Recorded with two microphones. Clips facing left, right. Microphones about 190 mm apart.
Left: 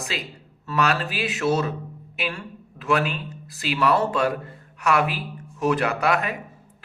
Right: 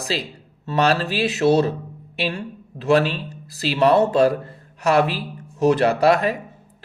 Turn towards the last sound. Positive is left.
turn(degrees=-35)  # may be behind; listen again after turning